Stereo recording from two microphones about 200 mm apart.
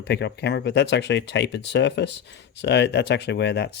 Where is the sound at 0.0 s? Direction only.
55° left (ahead or behind).